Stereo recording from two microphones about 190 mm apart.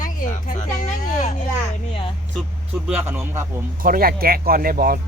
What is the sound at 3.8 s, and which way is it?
Speech, 50° right (ahead or behind).